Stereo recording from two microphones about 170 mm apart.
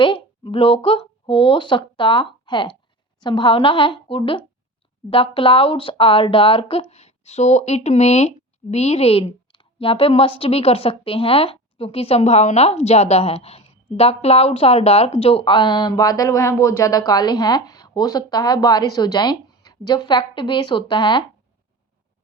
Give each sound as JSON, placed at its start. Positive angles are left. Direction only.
{"t": 0.0, "sound": "a woman's voice", "side_deg": 30}